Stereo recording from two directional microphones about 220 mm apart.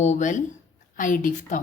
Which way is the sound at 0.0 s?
35° left (ahead or behind).